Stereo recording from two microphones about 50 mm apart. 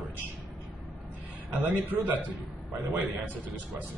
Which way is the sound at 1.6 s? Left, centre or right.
Right.